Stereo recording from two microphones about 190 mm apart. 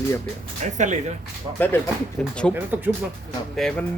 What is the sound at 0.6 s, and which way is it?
Speech, 40° right (ahead or behind).